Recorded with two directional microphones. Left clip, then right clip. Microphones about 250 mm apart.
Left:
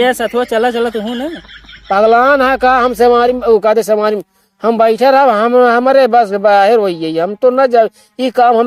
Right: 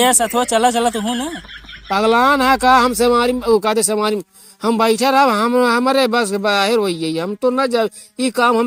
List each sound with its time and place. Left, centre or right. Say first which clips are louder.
0.0 s speech: left 2 dB; right
1.9 s speech: left 5 dB; right